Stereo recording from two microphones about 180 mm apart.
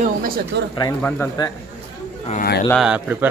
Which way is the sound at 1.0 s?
15° left (ahead or behind).